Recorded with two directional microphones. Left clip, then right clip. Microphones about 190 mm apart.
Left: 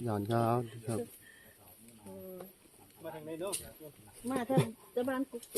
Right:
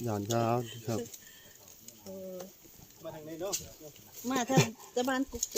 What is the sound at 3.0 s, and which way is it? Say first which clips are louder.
Speech: right 1 dB; 20° left (ahead or behind).